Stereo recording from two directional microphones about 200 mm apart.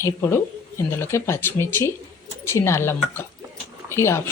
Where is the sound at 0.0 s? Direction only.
10° left (ahead or behind).